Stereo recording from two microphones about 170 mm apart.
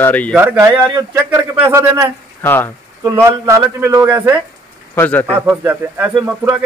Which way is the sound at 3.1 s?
15° right (ahead or behind).